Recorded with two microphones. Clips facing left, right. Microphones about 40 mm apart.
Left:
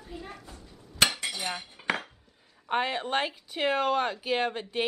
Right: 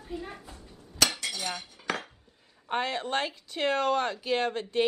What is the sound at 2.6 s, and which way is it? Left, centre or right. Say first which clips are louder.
Speech: left 2 dB; centre.